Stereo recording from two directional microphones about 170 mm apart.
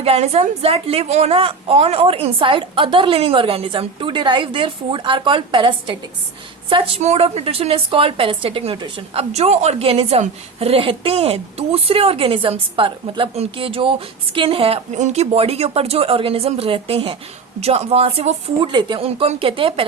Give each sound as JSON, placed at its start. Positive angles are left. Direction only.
{"t": 0.0, "sound": "a woman's voice", "side_deg": -40}